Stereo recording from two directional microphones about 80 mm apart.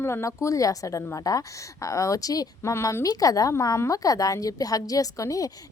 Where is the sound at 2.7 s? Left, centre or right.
Left.